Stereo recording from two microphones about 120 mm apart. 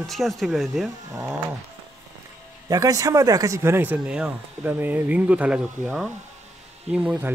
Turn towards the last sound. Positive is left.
turn(degrees=-10)  # may be behind; listen again after turning